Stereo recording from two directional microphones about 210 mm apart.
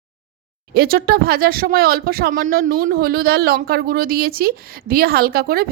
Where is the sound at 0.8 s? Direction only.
45° right (ahead or behind).